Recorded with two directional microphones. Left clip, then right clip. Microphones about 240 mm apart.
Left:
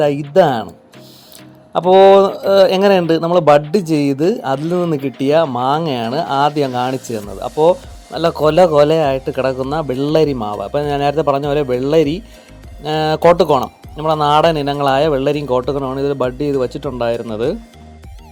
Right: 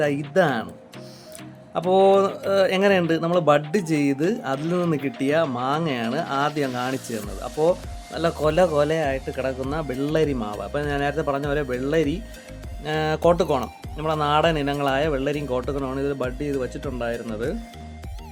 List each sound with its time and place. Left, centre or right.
0.0 s speech: centre
1.9 s speech: centre